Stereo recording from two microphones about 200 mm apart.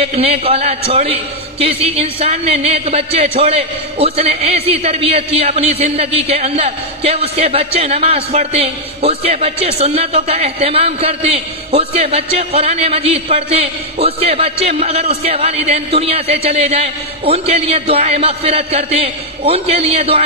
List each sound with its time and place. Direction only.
0.0 s a man's voice: 30° right (ahead or behind)